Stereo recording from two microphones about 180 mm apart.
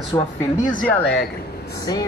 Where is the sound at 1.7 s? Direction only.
20° left (ahead or behind).